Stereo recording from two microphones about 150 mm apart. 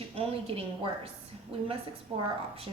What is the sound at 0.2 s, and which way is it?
Speech, 40° right (ahead or behind).